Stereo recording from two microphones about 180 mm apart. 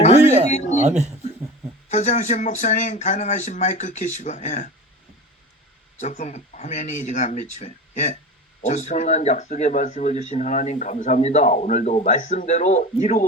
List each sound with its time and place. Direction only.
0.0 s a sound: 40° left (ahead or behind)
0.9 s speech: 40° right (ahead or behind)
1.9 s speech: 40° left (ahead or behind)
6.0 s speech: 40° left (ahead or behind)